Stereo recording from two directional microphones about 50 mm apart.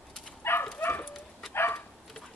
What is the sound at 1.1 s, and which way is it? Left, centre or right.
Bow-wow, centre.